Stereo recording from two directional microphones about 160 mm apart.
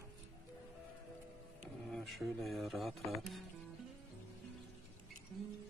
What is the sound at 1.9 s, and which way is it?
Speech, centre (ahead or behind).